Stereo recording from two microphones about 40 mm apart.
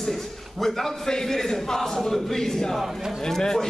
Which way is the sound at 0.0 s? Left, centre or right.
Centre.